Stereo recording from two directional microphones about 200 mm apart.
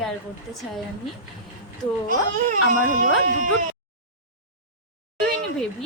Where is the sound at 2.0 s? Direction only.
40° right (ahead or behind).